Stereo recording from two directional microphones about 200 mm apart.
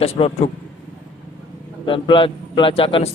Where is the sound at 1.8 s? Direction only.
25° left (ahead or behind).